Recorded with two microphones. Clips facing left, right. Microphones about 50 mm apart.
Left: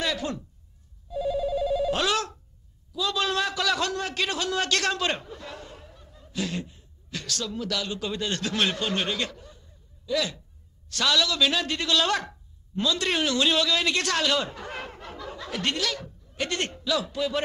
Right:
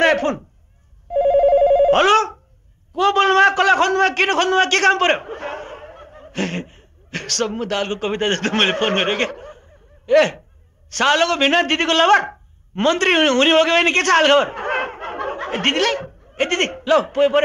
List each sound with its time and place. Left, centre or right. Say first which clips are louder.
0.0 s a sound: right 13 dB; right
1.0 s telephone bell ringing: right 13 dB; right
2.9 s a man's voice: right 12 dB; right